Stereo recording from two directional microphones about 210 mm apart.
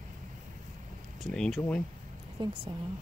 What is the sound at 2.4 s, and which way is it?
Speech, 20° right (ahead or behind).